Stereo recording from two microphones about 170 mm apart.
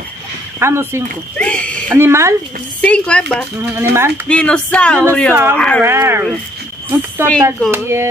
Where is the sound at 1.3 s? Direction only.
5° left (ahead or behind).